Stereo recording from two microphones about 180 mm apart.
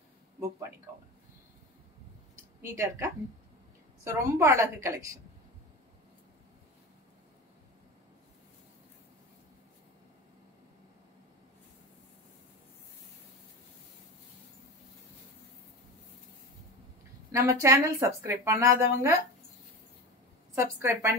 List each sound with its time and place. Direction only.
2.7 s speech: 15° right (ahead or behind)
17.3 s speech: 15° right (ahead or behind)
20.5 s speech: 15° right (ahead or behind)